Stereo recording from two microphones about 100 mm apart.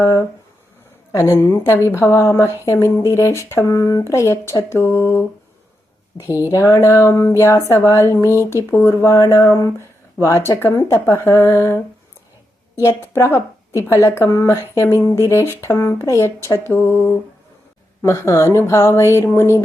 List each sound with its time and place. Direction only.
0.0 s speech: 30° left (ahead or behind)
6.1 s a woman's voice: 55° left (ahead or behind)
6.5 s speech: 30° left (ahead or behind)
12.8 s speech: 25° left (ahead or behind)